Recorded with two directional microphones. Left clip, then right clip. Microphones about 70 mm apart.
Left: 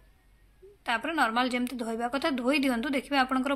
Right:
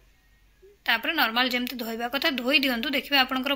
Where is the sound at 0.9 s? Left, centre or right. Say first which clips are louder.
Right 3 dB; left.